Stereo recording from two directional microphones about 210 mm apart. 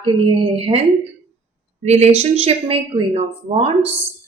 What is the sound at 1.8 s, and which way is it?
A woman's voice, 30° right (ahead or behind).